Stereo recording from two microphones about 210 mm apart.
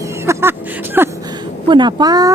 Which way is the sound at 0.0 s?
15° right (ahead or behind).